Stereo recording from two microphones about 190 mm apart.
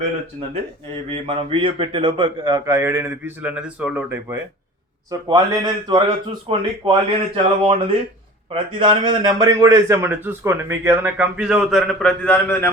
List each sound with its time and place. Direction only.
1.1 s a man's voice: 30° right (ahead or behind); by 4.4 s 10° right (ahead or behind)
5.3 s a man's voice: 20° right (ahead or behind); by 12.7 s 10° left (ahead or behind)